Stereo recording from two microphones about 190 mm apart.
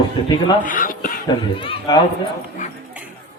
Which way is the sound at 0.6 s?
45° left (ahead or behind).